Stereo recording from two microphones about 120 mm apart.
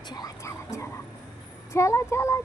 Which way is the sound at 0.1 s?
30° left (ahead or behind).